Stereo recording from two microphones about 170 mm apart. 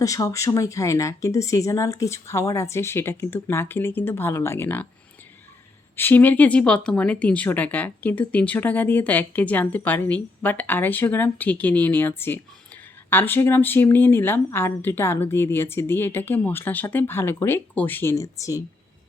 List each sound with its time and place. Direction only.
0.0 s speech: 20° left (ahead or behind)
6.0 s speech: 10° left (ahead or behind)